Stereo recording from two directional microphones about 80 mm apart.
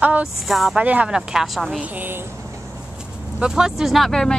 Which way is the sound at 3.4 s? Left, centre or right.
Centre.